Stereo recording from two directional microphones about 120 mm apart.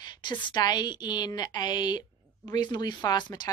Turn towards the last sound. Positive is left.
turn(degrees=35)  # may be behind; listen again after turning